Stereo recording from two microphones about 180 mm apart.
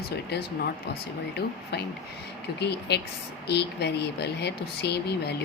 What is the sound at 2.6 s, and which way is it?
Speech, 65° left (ahead or behind).